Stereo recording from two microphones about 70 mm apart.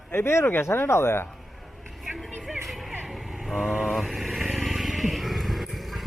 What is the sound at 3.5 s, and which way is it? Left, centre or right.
Vehicle, centre.